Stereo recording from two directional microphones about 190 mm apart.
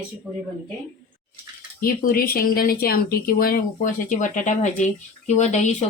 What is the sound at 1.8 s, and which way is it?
Speech, 50° left (ahead or behind).